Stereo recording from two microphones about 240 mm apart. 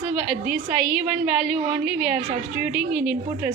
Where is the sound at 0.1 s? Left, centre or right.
Centre.